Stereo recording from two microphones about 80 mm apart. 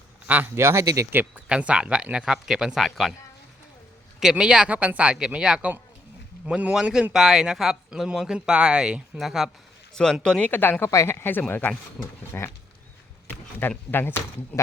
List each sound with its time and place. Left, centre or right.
0.5 s speech: right
1.5 s speech: centre
4.2 s a man's voice: centre
9.9 s speech: centre
10.5 s speech: left